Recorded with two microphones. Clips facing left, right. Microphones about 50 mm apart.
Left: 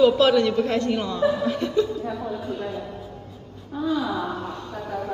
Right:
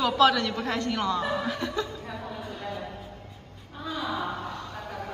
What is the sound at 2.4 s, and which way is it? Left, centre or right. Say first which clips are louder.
Speech: left 7 dB; left.